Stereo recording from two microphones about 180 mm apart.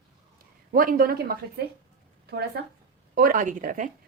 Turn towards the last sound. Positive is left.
turn(degrees=-45)  # may be behind; listen again after turning